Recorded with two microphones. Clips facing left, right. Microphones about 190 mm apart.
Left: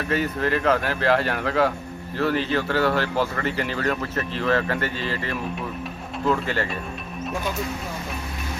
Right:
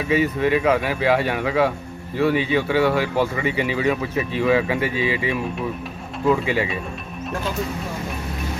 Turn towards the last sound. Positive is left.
turn(degrees=-5)  # may be behind; listen again after turning